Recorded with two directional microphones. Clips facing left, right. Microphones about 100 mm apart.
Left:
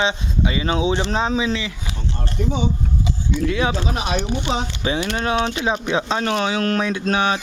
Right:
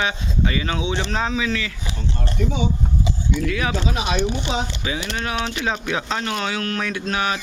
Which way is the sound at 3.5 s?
25° left (ahead or behind).